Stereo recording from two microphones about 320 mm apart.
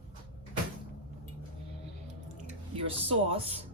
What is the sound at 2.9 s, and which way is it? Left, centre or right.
Speech, centre.